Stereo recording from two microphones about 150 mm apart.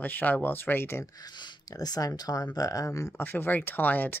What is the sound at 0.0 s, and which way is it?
Speech, 10° left (ahead or behind).